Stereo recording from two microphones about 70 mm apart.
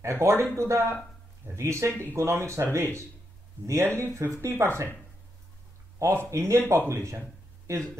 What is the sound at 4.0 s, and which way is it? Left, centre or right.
Speech, right.